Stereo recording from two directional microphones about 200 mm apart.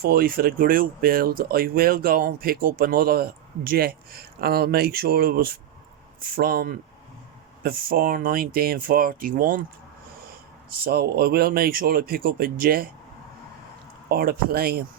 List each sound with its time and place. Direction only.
0.0 s speech: 45° right (ahead or behind)
10.7 s speech: 50° right (ahead or behind)
14.1 s speech: 50° right (ahead or behind)